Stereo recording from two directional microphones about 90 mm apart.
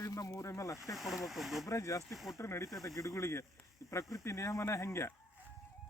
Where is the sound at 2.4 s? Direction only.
35° left (ahead or behind).